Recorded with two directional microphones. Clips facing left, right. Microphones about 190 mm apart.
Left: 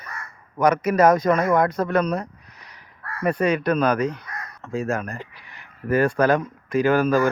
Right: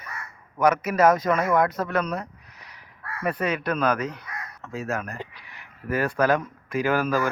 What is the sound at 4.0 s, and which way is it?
Speech, 5° right (ahead or behind).